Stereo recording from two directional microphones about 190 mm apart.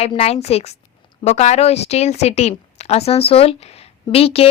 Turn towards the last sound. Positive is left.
turn(degrees=30)  # may be behind; listen again after turning